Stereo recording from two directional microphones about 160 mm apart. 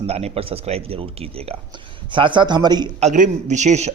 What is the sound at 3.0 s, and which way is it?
Speech, 50° right (ahead or behind).